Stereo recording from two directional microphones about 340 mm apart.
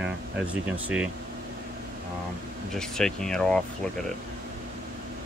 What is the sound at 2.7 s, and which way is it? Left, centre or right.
Speech, centre.